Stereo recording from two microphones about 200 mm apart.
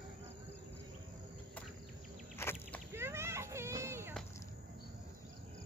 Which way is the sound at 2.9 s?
10° right (ahead or behind).